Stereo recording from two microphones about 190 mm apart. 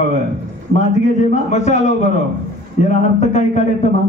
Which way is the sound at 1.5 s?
35° left (ahead or behind).